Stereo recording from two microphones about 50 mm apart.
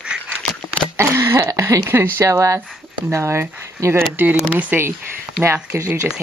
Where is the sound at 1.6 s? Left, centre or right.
Right.